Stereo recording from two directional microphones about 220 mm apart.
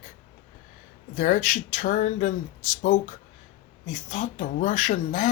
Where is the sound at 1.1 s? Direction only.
35° left (ahead or behind).